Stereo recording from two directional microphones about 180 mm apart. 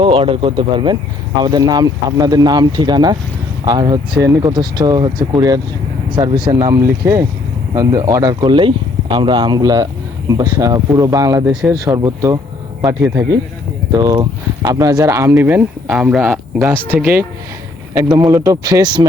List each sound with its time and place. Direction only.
0.0 s speech: 30° right (ahead or behind)